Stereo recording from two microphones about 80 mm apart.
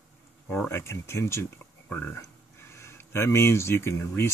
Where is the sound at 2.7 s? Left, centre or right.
Left.